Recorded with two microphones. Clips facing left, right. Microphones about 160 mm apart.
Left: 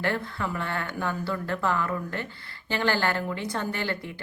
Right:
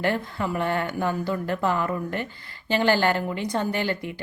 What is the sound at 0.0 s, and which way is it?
Speech, 15° right (ahead or behind).